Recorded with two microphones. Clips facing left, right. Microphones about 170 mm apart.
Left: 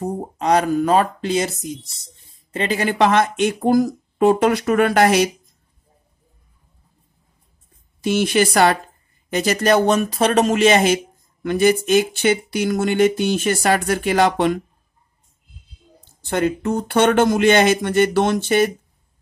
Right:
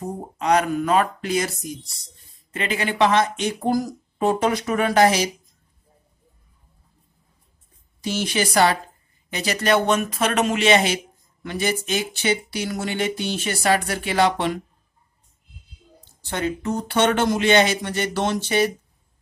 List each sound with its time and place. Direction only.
0.0 s speech: 35° left (ahead or behind); by 5.3 s 55° left (ahead or behind)
8.0 s speech: 55° left (ahead or behind)
16.3 s speech: 55° left (ahead or behind)